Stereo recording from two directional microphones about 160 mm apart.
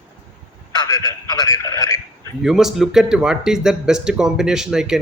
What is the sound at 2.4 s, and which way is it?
Speech, centre (ahead or behind).